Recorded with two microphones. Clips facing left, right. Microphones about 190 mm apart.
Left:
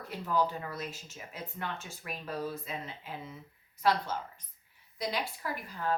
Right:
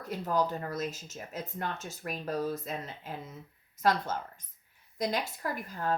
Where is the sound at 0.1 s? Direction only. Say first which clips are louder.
Right 1 dB; 45° right (ahead or behind).